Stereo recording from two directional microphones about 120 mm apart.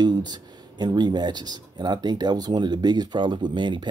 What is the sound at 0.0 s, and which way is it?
Speech, 35° right (ahead or behind).